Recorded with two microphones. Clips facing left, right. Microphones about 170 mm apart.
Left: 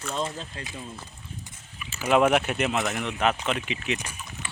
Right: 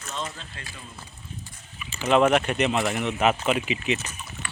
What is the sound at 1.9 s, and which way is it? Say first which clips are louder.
Speech: right 1 dB; 10° left (ahead or behind).